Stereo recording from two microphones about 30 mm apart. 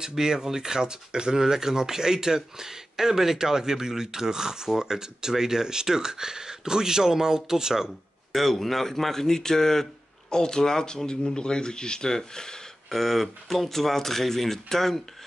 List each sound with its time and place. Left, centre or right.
0.1 s speech: centre
8.3 s speech: centre; by 12.6 s left
12.9 s speech: centre